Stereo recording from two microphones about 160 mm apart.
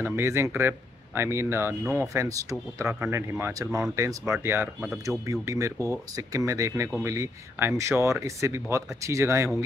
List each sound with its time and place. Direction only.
0.0 s speech: 15° right (ahead or behind)